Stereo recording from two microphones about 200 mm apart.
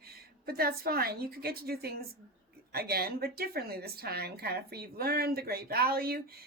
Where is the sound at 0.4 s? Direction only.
50° right (ahead or behind).